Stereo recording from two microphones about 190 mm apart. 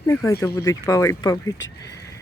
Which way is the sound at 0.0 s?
15° left (ahead or behind).